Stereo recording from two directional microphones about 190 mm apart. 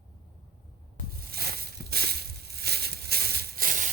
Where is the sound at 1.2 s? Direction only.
55° right (ahead or behind).